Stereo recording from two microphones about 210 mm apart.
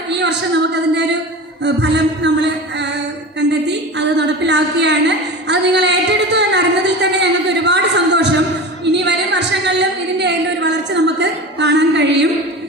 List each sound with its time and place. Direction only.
0.1 s a woman's voice: 55° right (ahead or behind)
1.6 s music: 55° right (ahead or behind)
3.7 s a sound: 55° right (ahead or behind)